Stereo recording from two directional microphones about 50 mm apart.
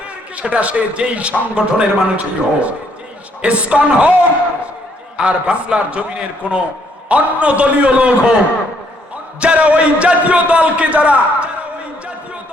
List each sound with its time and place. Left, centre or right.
0.3 s a man's voice: right
9.4 s a man's voice: right